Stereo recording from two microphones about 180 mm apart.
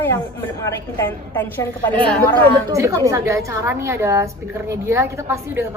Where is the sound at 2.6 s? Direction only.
15° right (ahead or behind).